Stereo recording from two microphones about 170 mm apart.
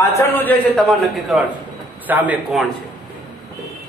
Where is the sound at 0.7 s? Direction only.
Centre (ahead or behind).